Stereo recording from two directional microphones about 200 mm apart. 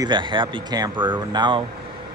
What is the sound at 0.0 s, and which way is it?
A man's voice, 25° right (ahead or behind).